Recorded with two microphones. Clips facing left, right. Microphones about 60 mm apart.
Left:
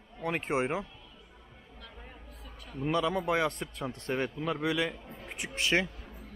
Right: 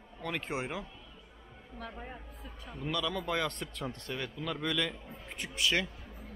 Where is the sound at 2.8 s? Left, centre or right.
Left.